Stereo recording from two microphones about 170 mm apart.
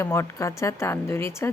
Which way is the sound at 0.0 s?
15° left (ahead or behind).